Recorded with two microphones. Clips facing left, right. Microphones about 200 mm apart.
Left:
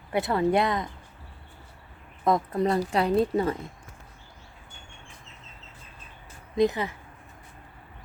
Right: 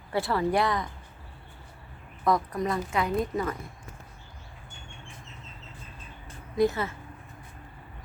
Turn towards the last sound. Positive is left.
turn(degrees=15)  # may be behind; listen again after turning